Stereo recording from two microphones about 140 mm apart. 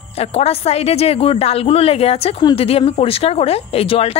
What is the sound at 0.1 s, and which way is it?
Speech, 45° left (ahead or behind).